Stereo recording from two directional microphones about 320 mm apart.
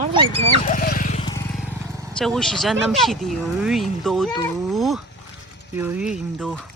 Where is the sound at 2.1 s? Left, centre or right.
Centre.